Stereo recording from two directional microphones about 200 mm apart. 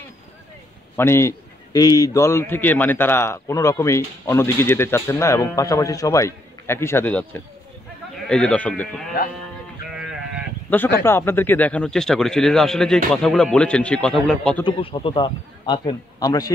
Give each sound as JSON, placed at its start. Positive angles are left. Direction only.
{"t": 0.9, "sound": "a man's voice", "side_deg": 15}
{"t": 9.8, "sound": "sheep", "side_deg": -5}
{"t": 10.7, "sound": "speech", "side_deg": 10}
{"t": 14.6, "sound": "a man's voice", "side_deg": 25}